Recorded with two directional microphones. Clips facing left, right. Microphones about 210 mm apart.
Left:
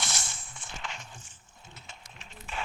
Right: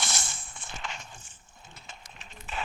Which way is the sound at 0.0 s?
50° right (ahead or behind).